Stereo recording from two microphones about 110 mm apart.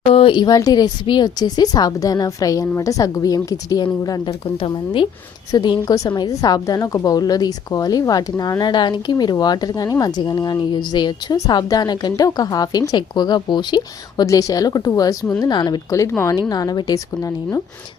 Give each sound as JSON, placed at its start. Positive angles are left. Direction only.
{"t": 0.1, "sound": "a woman's voice", "side_deg": 50}
{"t": 5.5, "sound": "a woman's voice", "side_deg": 40}
{"t": 15.9, "sound": "a woman's voice", "side_deg": 25}